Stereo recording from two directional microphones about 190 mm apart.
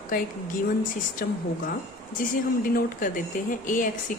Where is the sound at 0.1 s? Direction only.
45° left (ahead or behind).